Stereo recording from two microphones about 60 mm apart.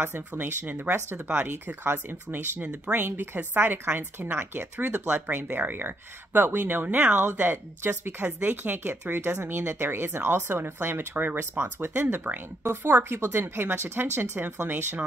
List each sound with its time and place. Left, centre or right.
0.0 s a woman's voice: right